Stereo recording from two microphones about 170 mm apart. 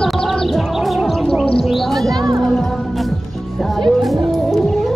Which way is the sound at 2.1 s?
20° right (ahead or behind).